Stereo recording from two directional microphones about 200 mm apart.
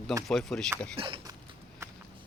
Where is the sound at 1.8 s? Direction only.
15° right (ahead or behind).